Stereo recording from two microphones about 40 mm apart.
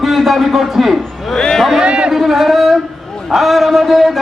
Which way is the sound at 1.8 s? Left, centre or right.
Right.